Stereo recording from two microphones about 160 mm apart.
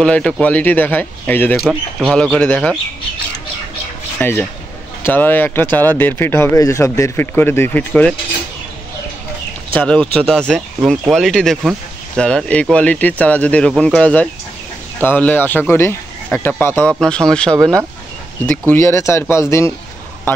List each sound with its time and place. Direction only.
0.0 s speech: 5° left (ahead or behind)
1.6 s speech: centre (ahead or behind)
4.2 s speech: 15° left (ahead or behind)
9.8 s speech: 5° left (ahead or behind)
18.7 s speech: 15° left (ahead or behind)